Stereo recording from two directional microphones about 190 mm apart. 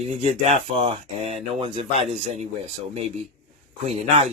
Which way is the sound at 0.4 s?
35° right (ahead or behind).